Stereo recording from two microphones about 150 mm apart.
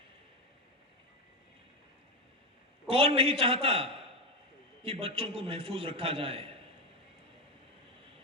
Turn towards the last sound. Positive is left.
turn(degrees=-40)  # may be behind; listen again after turning